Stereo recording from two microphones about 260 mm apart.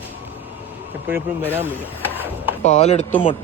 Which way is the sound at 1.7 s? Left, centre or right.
Centre.